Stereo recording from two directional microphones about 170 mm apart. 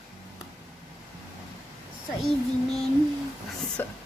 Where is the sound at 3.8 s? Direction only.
10° left (ahead or behind).